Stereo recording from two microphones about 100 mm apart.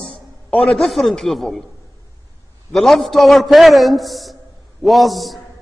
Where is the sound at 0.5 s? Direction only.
5° left (ahead or behind).